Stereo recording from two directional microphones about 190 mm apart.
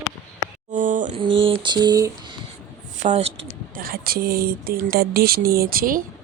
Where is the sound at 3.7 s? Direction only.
50° right (ahead or behind).